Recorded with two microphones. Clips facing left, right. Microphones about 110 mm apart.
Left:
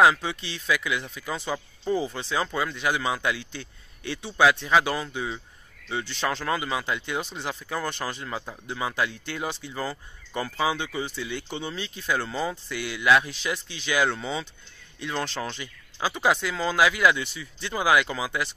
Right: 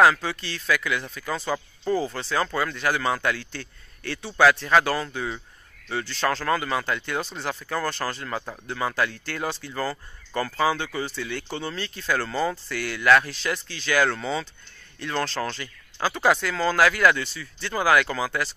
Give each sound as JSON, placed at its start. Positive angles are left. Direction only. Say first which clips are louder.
{"t": 0.0, "sound": "speech", "louder": "right 1 dB", "side_deg": 20}